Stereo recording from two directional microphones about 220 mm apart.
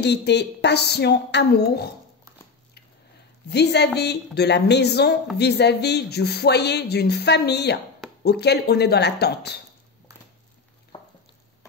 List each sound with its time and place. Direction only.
0.0 s speech: 50° left (ahead or behind)
3.4 s speech: 50° left (ahead or behind)
10.9 s a sound: 25° left (ahead or behind)